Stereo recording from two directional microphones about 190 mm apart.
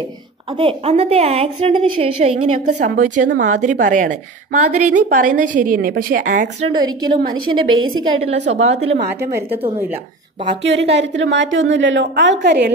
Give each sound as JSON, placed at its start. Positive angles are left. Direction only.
{"t": 0.6, "sound": "a woman's voice", "side_deg": -30}
{"t": 2.6, "sound": "a woman's voice", "side_deg": -45}
{"t": 6.2, "sound": "a woman's voice", "side_deg": -65}
{"t": 6.7, "sound": "a woman's voice", "side_deg": -25}
{"t": 7.7, "sound": "a woman's voice", "side_deg": -90}
{"t": 8.2, "sound": "a woman's voice", "side_deg": -35}
{"t": 10.6, "sound": "a woman's voice", "side_deg": -65}